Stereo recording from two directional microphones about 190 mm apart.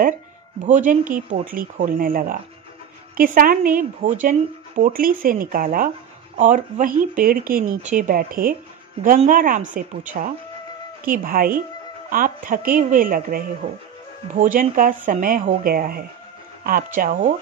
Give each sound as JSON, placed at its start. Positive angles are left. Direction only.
{"t": 0.7, "sound": "speech", "side_deg": -40}
{"t": 11.1, "sound": "speech", "side_deg": -50}